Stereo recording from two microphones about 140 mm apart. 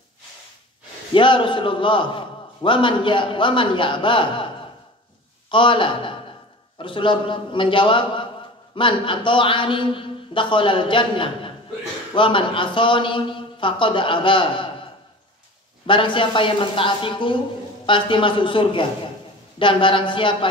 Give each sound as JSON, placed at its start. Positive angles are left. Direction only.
{"t": 1.1, "sound": "a man's voice", "side_deg": 35}
{"t": 5.5, "sound": "a man's voice", "side_deg": 35}
{"t": 15.9, "sound": "a man's voice", "side_deg": 35}